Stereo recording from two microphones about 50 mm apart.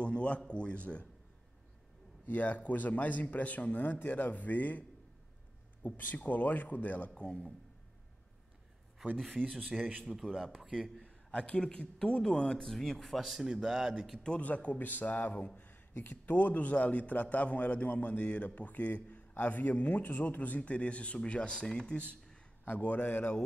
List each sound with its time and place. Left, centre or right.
0.0 s a sound: left
0.5 s speech: left
2.2 s a man's voice: left
9.2 s speech: centre
9.8 s a man's voice: right
10.0 s speech: centre
11.2 s speech: centre
12.7 s speech: centre
13.2 s speech: centre
14.2 s a man's voice: left
22.7 s a man's voice: left